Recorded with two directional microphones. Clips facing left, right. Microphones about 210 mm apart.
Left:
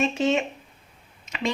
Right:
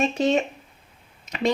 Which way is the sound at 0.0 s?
35° right (ahead or behind).